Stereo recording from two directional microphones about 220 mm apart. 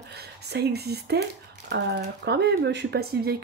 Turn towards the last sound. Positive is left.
turn(degrees=-45)  # may be behind; listen again after turning